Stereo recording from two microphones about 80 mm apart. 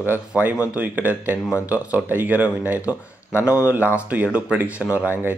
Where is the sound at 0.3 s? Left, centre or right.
Centre.